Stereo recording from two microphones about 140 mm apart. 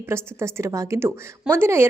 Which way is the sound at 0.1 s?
20° right (ahead or behind).